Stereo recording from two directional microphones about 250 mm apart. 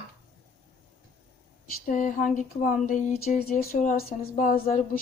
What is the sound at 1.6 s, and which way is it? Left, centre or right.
A woman's voice, left.